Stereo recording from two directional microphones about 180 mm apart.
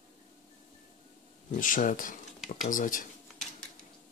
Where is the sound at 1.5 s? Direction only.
45° left (ahead or behind).